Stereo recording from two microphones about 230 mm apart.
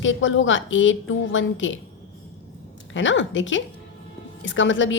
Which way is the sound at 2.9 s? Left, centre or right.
Left.